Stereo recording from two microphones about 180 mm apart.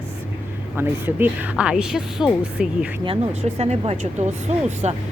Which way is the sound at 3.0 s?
30° right (ahead or behind).